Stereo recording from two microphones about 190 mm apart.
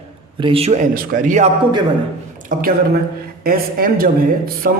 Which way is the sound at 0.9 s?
45° right (ahead or behind).